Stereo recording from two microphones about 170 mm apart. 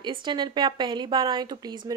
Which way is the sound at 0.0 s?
25° right (ahead or behind).